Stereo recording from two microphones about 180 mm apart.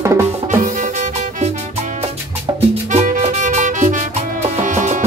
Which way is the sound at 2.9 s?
40° right (ahead or behind).